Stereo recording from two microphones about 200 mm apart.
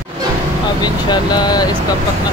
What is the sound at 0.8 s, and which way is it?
Speech, 20° left (ahead or behind).